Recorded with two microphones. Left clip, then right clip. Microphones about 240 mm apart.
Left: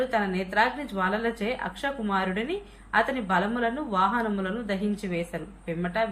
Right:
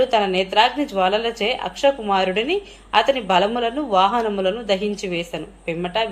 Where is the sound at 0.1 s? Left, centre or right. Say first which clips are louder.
Right 9 dB; right.